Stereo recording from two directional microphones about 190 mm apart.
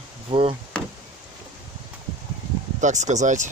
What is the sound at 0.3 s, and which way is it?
Speech, 25° right (ahead or behind).